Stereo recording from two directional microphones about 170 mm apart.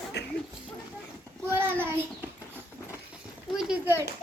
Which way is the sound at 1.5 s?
15° right (ahead or behind).